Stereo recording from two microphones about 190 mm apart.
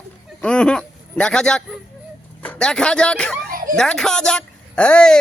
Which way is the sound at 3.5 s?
45° right (ahead or behind).